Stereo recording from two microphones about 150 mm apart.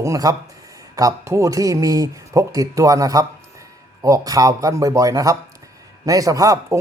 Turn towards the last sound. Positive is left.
turn(degrees=-20)  # may be behind; listen again after turning